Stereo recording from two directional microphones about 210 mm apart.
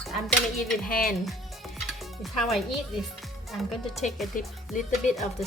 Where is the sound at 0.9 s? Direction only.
45° left (ahead or behind).